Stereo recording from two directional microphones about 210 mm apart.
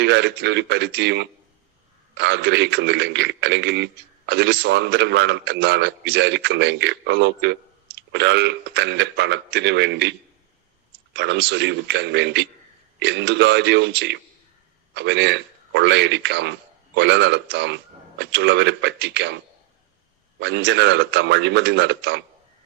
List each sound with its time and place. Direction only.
0.0 s a man's voice: 55° right (ahead or behind)
20.4 s a man's voice: 55° right (ahead or behind)